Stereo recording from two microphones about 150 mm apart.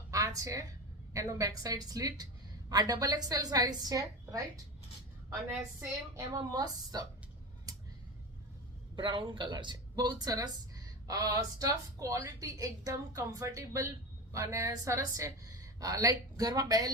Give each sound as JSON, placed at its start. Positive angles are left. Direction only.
{"t": 0.1, "sound": "a sound", "side_deg": -20}
{"t": 1.1, "sound": "speech", "side_deg": -25}
{"t": 6.1, "sound": "speech", "side_deg": -25}
{"t": 9.0, "sound": "speech", "side_deg": -30}